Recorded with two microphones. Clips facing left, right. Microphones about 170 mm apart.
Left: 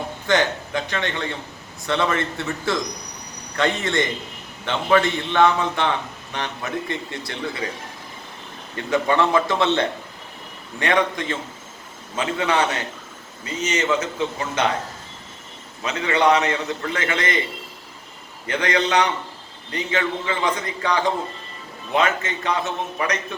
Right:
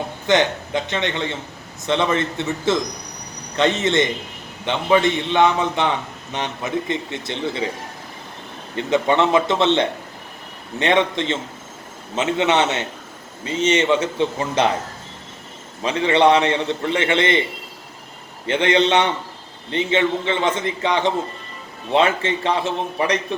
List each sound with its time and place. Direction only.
0.3 s a man's voice: 20° right (ahead or behind)
8.7 s a man's voice: 20° right (ahead or behind)
15.8 s a man's voice: 30° right (ahead or behind)
18.4 s a man's voice: 25° right (ahead or behind)